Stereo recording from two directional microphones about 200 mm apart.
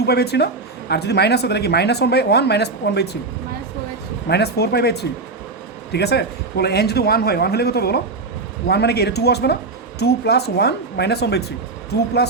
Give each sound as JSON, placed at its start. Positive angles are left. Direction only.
{"t": 0.0, "sound": "speech", "side_deg": 55}
{"t": 4.3, "sound": "a man's voice", "side_deg": 55}